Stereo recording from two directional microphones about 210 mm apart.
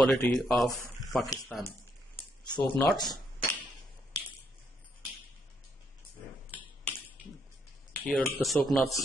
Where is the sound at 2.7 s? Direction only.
10° left (ahead or behind).